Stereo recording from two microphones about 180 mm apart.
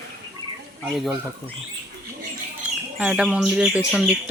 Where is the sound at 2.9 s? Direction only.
5° right (ahead or behind).